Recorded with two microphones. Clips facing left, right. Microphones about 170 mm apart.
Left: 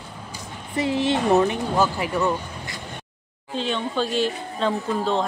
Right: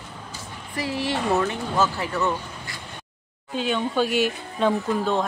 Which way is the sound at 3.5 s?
5° right (ahead or behind).